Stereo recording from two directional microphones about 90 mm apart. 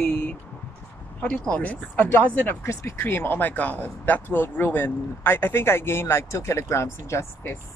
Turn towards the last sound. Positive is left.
turn(degrees=30)  # may be behind; listen again after turning